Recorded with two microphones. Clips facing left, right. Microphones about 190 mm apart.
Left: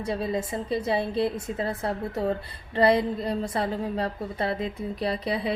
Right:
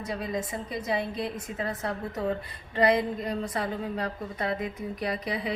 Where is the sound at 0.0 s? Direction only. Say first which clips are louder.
Left 4 dB; 30° left (ahead or behind).